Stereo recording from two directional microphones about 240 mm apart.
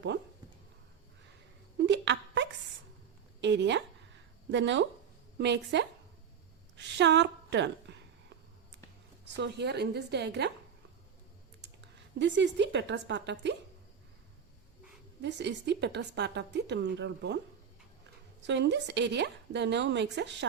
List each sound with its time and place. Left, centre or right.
1.8 s wail: right
3.4 s a sound: right
5.4 s a woman's voice: right
9.3 s a woman's voice: right
12.2 s a woman's voice: right
15.2 s a woman's voice: right
18.4 s a woman's voice: right